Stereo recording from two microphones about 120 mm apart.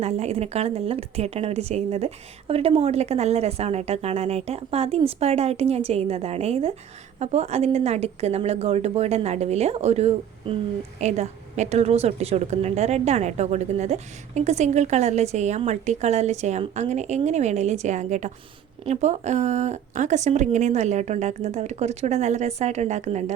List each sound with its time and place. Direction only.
0.0 s a woman's voice: 60° right (ahead or behind)
11.0 s a woman's voice: 75° right (ahead or behind)